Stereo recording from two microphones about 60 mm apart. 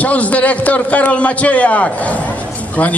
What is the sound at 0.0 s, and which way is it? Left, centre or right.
A man's voice, left.